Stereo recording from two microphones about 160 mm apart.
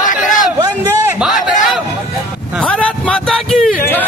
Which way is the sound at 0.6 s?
20° right (ahead or behind).